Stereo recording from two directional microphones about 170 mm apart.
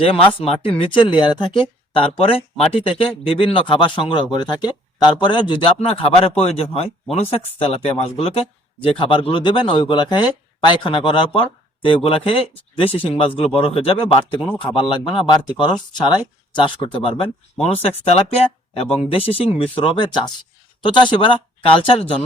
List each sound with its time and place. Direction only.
0.1 s speech: 35° left (ahead or behind)